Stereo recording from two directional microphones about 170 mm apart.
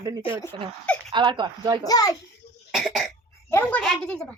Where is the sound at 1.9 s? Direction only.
20° left (ahead or behind).